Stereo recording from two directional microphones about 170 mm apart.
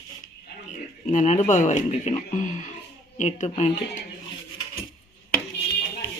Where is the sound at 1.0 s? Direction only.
45° left (ahead or behind).